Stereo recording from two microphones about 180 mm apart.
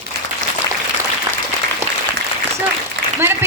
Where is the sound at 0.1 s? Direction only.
65° right (ahead or behind).